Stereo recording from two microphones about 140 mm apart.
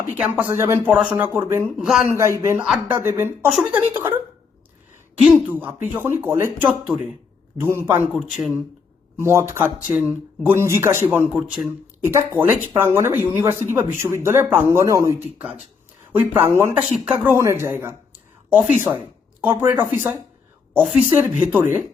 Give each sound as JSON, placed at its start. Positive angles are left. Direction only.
{"t": 0.2, "sound": "speech", "side_deg": -10}
{"t": 1.8, "sound": "speech", "side_deg": 0}
{"t": 2.0, "sound": "speech", "side_deg": -20}
{"t": 5.5, "sound": "speech", "side_deg": -15}
{"t": 8.3, "sound": "speech", "side_deg": 0}
{"t": 9.1, "sound": "speech", "side_deg": -20}
{"t": 11.3, "sound": "speech", "side_deg": -5}
{"t": 12.0, "sound": "speech", "side_deg": -15}